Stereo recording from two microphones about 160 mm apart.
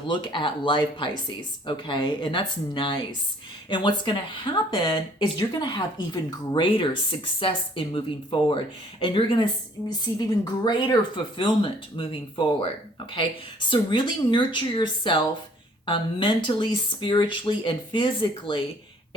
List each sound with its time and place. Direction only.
0.1 s speech: 30° left (ahead or behind)